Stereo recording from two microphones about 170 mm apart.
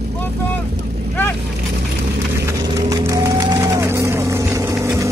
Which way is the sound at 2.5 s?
20° right (ahead or behind).